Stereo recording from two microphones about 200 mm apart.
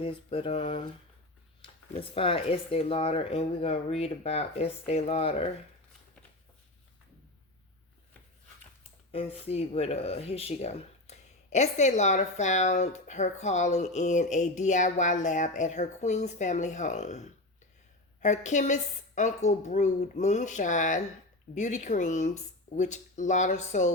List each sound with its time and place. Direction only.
0.0 s speech: 30° left (ahead or behind)
9.1 s speech: 30° left (ahead or behind)